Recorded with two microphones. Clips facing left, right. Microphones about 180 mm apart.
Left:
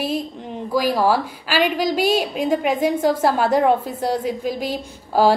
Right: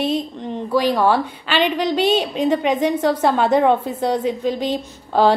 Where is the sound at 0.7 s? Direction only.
5° left (ahead or behind).